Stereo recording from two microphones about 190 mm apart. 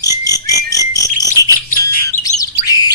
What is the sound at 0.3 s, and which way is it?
Whistle, 20° left (ahead or behind).